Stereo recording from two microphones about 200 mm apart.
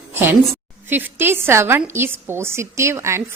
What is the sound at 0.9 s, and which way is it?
A woman's voice, 10° right (ahead or behind).